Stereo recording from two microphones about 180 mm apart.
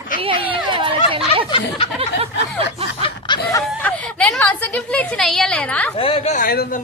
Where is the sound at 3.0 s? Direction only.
25° left (ahead or behind).